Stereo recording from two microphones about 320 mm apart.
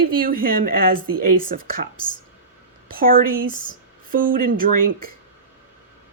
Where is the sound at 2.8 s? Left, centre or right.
Right.